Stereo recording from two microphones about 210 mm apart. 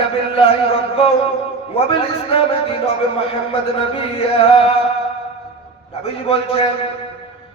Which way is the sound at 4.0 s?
25° left (ahead or behind).